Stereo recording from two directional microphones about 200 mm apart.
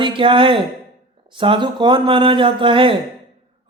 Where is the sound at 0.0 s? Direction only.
25° right (ahead or behind).